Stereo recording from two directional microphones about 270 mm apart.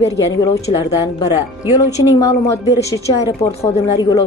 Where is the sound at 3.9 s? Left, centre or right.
Centre.